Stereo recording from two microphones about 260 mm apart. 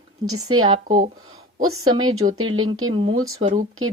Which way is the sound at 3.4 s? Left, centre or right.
Right.